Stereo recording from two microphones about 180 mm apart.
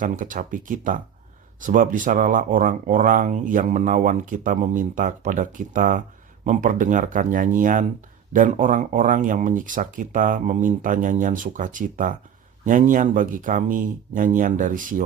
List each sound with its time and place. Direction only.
0.0 s speech: 45° right (ahead or behind)